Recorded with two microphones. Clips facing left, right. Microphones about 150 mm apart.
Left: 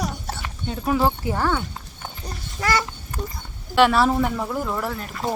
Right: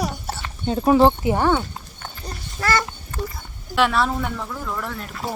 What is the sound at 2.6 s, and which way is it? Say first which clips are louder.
Speech: right 1 dB; 15° left (ahead or behind).